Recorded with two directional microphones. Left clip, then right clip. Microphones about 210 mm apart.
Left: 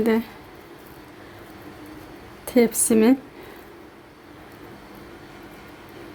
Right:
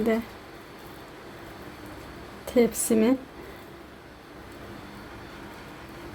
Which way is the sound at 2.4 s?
20° left (ahead or behind).